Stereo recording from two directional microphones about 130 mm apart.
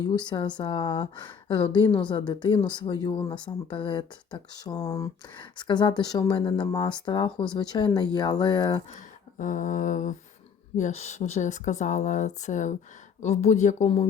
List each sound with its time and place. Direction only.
0.1 s speech: 35° left (ahead or behind)
5.4 s speech: 40° left (ahead or behind)
9.4 s speech: 75° left (ahead or behind)
10.8 s speech: 65° left (ahead or behind)